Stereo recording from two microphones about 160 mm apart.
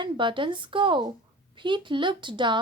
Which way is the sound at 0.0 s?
30° right (ahead or behind).